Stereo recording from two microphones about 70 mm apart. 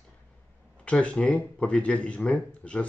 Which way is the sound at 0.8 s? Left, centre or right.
Centre.